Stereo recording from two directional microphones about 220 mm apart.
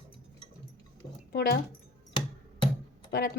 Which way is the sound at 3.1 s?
45° left (ahead or behind).